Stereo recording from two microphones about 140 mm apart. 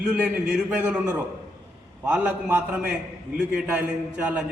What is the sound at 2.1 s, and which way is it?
A man's voice, 10° right (ahead or behind).